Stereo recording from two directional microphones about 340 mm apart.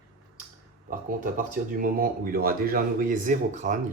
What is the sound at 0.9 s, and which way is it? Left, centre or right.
Speech, right.